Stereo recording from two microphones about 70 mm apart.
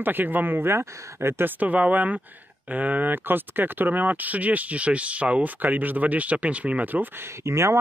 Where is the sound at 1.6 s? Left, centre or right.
Right.